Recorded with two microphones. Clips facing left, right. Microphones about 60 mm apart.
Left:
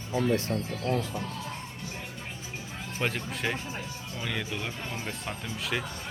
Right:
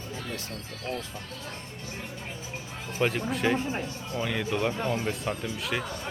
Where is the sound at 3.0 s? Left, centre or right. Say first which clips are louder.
Right 5 dB; centre.